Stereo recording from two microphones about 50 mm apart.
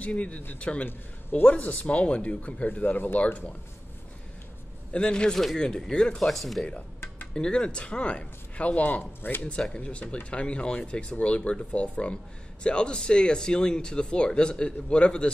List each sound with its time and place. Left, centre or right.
0.0 s speech: left
4.9 s speech: centre
6.2 s speech: centre
7.3 s speech: centre
9.2 s speech: left
9.8 s speech: left